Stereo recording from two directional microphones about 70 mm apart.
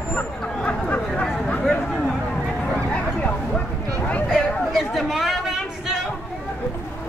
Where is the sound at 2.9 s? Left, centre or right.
Centre.